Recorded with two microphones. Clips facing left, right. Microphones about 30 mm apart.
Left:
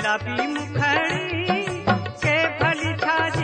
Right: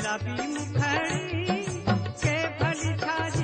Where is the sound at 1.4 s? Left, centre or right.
Left.